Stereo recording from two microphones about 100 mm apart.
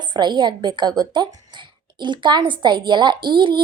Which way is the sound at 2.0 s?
50° right (ahead or behind).